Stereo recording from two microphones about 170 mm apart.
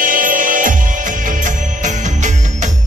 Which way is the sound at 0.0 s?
55° right (ahead or behind).